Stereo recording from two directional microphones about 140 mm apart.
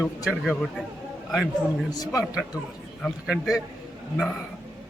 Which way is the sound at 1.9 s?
25° left (ahead or behind).